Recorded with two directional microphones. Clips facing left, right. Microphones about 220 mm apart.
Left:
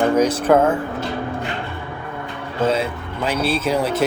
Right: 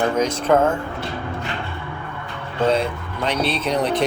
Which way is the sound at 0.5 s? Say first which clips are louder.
Left 1 dB; 5° left (ahead or behind).